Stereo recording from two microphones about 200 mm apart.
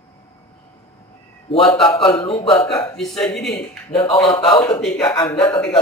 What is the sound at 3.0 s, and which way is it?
A man's voice, 5° left (ahead or behind).